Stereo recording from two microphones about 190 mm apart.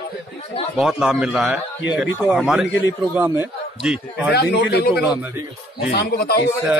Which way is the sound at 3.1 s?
15° right (ahead or behind).